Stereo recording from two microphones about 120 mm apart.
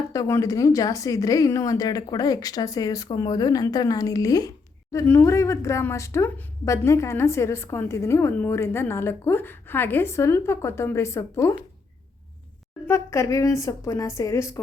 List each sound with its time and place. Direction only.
0.1 s speech: 25° left (ahead or behind)
12.9 s speech: 25° left (ahead or behind)